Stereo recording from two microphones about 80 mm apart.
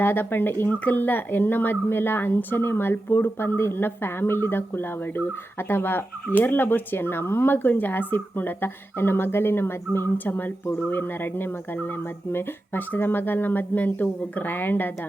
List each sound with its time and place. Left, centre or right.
0.0 s speech: left